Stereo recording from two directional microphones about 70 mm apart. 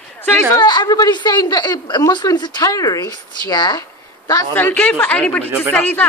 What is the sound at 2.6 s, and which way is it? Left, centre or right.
Speech, left.